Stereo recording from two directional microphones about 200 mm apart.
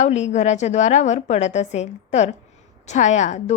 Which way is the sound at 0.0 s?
35° left (ahead or behind).